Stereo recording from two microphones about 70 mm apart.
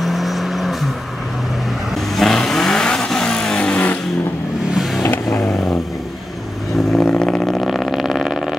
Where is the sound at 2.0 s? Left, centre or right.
Centre; by 4.0 s left.